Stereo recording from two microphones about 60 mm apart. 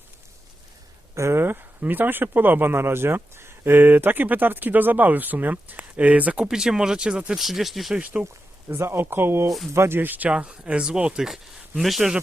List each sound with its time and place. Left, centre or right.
1.1 s speech: right
6.4 s speech: centre
7.9 s speech: right
8.7 s speech: right
10.2 s speech: centre
11.3 s speech: centre